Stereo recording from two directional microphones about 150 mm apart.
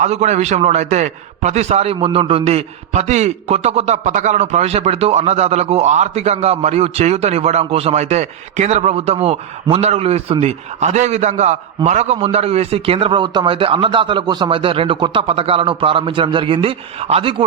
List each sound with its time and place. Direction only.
0.0 s a man's voice: 50° right (ahead or behind)